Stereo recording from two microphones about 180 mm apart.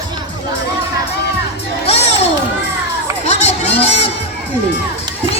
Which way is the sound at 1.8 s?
35° left (ahead or behind).